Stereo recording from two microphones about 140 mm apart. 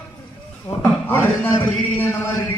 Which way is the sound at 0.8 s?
15° left (ahead or behind).